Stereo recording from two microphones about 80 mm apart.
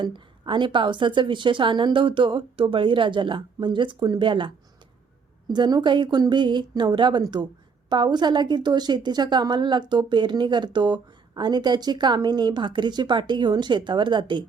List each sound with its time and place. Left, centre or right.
0.0 s a woman's voice: right
5.5 s a woman's voice: right